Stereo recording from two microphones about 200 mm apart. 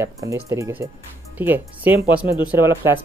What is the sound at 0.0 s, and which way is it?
Speech, 15° right (ahead or behind).